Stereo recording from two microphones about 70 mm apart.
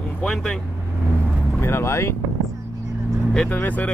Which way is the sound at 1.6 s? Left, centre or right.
Left.